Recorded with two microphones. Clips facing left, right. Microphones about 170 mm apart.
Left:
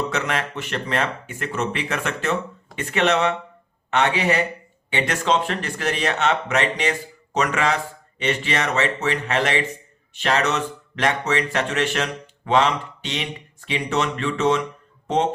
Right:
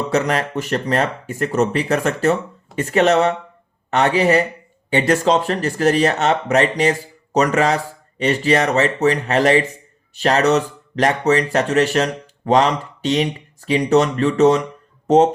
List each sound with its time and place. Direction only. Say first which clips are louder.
0.1 s speech: right 7 dB; 40° right (ahead or behind)